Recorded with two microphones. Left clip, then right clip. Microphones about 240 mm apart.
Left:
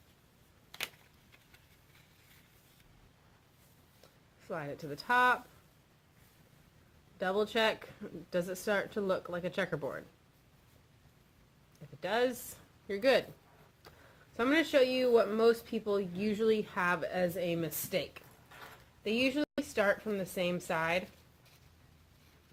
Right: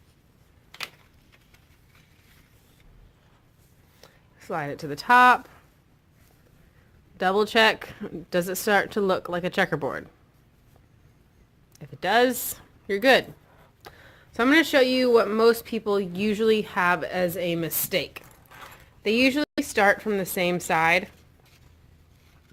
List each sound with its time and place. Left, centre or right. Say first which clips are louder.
4.4 s speech: right 10 dB; right
7.2 s speech: right 11 dB; right
11.9 s speech: right 11 dB; right
13.8 s a sound: right 11 dB; right
14.3 s speech: right 9 dB; right